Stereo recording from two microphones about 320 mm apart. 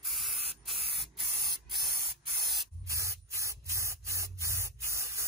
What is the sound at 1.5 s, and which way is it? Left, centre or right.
Spray, centre.